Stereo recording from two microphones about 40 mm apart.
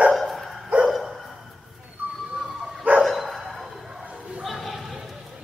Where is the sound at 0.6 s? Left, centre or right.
Right.